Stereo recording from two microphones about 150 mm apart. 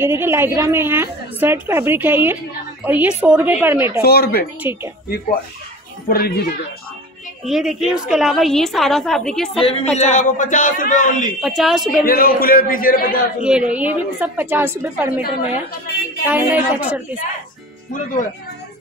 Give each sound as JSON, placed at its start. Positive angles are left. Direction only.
{"t": 0.0, "sound": "a woman's voice", "side_deg": -15}
{"t": 4.0, "sound": "speech", "side_deg": 90}
{"t": 6.0, "sound": "speech", "side_deg": 85}
{"t": 7.4, "sound": "a woman's voice", "side_deg": 0}
{"t": 9.6, "sound": "a man's voice", "side_deg": 40}
{"t": 11.4, "sound": "a woman's voice", "side_deg": 0}
{"t": 12.0, "sound": "a man's voice", "side_deg": 80}
{"t": 13.4, "sound": "a woman's voice", "side_deg": -5}